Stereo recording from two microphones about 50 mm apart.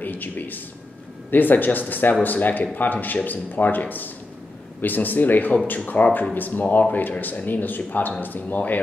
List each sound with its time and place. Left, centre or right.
0.0 s speech: left